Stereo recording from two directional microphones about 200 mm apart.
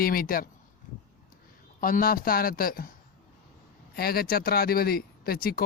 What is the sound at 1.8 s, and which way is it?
Speech, 45° left (ahead or behind).